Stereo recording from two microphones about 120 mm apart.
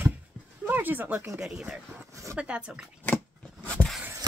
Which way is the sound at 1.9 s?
25° right (ahead or behind).